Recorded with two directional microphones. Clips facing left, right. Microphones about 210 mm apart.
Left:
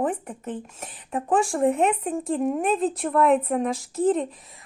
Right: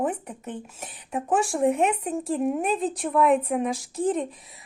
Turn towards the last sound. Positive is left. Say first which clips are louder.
# left 3 dB
turn(degrees=0)  # may be behind; listen again after turning